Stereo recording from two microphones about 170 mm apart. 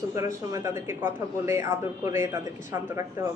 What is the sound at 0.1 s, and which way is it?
Speech, 15° right (ahead or behind).